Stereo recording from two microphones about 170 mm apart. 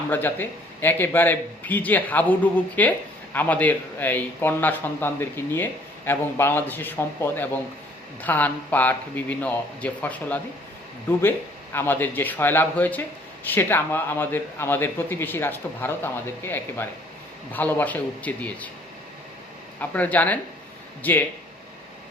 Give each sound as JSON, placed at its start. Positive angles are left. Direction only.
{"t": 0.1, "sound": "a man's voice", "side_deg": 10}
{"t": 19.8, "sound": "a man's voice", "side_deg": 10}